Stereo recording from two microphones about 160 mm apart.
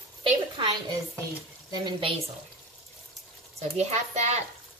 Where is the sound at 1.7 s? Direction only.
30° right (ahead or behind).